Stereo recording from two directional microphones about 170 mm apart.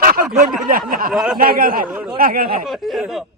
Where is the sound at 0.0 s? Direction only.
60° right (ahead or behind).